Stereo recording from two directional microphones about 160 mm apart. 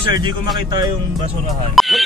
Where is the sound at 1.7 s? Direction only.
Centre (ahead or behind).